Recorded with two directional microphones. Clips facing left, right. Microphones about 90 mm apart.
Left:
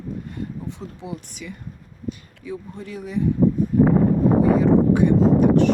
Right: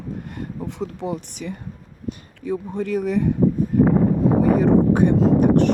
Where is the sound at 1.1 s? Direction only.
55° right (ahead or behind).